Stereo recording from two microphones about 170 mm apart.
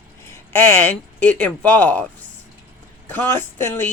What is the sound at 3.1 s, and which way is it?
Speech, 15° left (ahead or behind).